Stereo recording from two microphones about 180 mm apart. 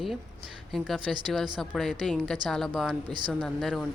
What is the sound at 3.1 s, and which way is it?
Speech, 25° right (ahead or behind).